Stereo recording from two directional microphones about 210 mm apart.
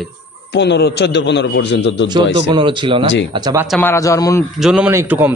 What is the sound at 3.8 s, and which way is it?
Speech, 15° left (ahead or behind).